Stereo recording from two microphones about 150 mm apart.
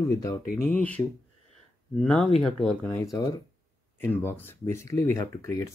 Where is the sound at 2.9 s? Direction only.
20° left (ahead or behind).